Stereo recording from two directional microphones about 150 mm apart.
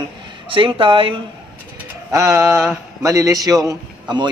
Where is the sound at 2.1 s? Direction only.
20° right (ahead or behind).